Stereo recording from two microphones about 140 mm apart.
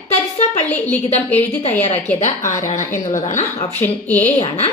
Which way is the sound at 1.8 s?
50° left (ahead or behind).